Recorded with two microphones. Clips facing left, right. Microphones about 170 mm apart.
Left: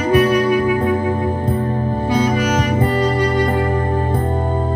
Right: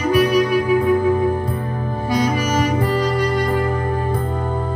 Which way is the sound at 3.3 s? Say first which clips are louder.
Left 2 dB; 20° left (ahead or behind).